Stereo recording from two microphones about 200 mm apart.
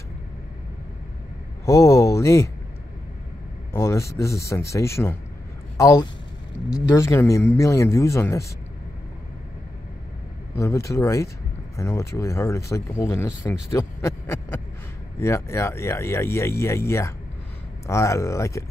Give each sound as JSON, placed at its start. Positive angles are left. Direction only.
{"t": 1.7, "sound": "speech", "side_deg": 15}
{"t": 3.7, "sound": "speech", "side_deg": 15}
{"t": 10.5, "sound": "speech", "side_deg": 15}